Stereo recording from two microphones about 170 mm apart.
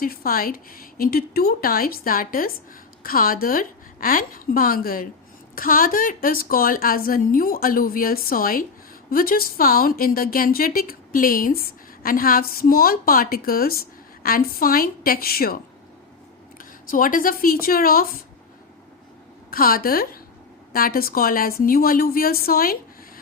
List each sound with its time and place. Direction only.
0.0 s a woman's voice: 60° left (ahead or behind)
16.9 s a woman's voice: 55° left (ahead or behind)
19.5 s a woman's voice: 60° left (ahead or behind)